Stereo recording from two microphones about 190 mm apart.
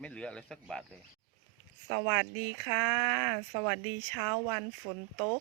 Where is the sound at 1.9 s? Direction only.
10° right (ahead or behind).